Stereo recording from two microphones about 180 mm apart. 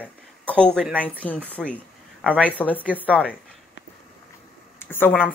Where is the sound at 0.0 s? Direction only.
5° left (ahead or behind).